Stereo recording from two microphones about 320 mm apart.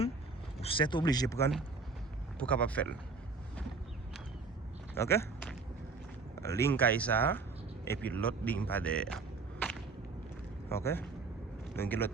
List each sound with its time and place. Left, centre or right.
0.6 s speech: centre
4.9 s speech: centre